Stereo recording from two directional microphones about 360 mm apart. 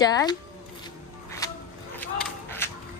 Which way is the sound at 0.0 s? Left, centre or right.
Centre.